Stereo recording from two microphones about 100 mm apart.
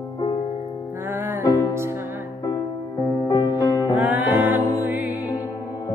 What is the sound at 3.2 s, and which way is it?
Music, 40° left (ahead or behind).